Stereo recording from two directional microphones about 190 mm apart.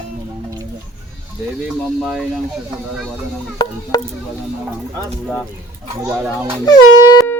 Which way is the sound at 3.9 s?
20° left (ahead or behind).